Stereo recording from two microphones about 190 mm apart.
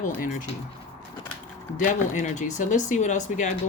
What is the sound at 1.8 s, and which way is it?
Speech, 40° left (ahead or behind).